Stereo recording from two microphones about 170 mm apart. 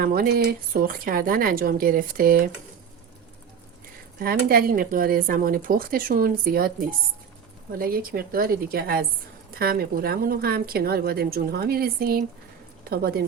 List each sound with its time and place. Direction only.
0.0 s speech: 60° right (ahead or behind)
4.2 s speech: 60° right (ahead or behind)